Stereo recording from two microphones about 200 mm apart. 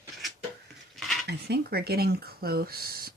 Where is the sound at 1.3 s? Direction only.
55° right (ahead or behind).